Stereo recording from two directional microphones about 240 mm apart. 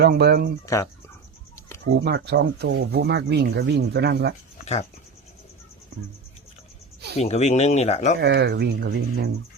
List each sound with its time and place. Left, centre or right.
0.0 s speech: right
0.6 s speech: centre
2.0 s speech: right
4.5 s a sound: left
7.2 s speech: left
8.2 s speech: right